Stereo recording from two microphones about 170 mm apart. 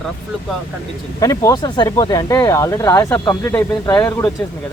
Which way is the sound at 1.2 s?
20° left (ahead or behind).